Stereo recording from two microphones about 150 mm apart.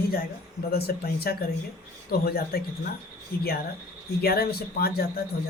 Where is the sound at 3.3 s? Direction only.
80° left.